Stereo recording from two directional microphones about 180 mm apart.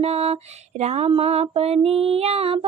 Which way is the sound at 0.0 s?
35° right (ahead or behind).